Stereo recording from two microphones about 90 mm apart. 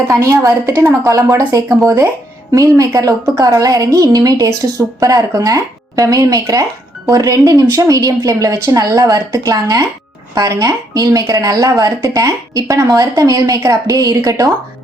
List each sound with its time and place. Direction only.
0.1 s speech: 40° right (ahead or behind)